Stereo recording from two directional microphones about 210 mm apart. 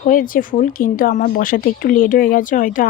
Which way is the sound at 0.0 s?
40° left (ahead or behind).